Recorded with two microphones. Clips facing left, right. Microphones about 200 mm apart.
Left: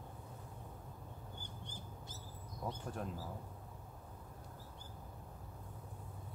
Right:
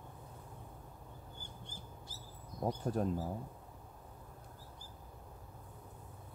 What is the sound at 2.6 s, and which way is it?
Speech, 40° right (ahead or behind).